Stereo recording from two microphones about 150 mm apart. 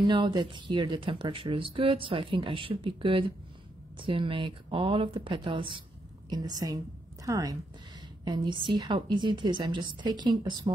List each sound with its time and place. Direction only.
0.0 s a woman's voice: 30° right (ahead or behind)